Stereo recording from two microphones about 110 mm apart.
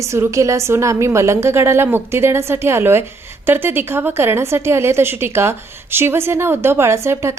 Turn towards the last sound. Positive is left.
turn(degrees=-25)  # may be behind; listen again after turning